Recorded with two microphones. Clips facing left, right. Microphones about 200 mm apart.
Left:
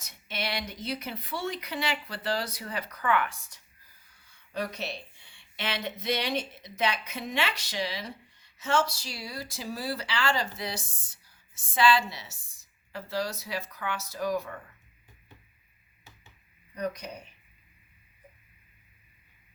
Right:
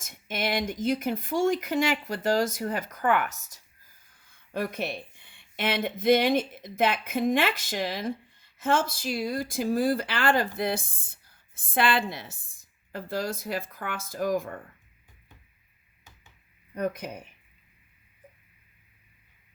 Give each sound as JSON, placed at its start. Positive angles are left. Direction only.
{"t": 0.0, "sound": "speech", "side_deg": -50}
{"t": 16.7, "sound": "speech", "side_deg": -50}